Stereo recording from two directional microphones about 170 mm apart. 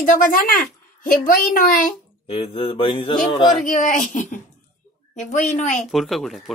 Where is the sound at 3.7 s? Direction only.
50° left (ahead or behind).